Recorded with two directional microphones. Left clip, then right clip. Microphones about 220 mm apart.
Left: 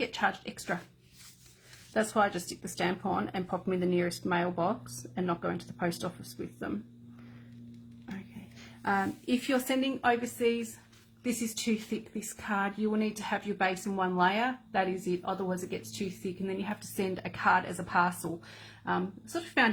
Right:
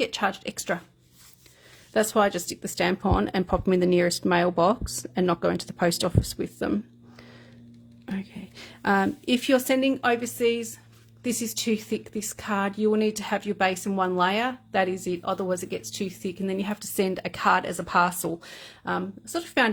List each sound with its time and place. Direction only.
0.0 s speech: 45° right (ahead or behind)
1.9 s speech: 45° right (ahead or behind)
8.8 s speech: 45° right (ahead or behind)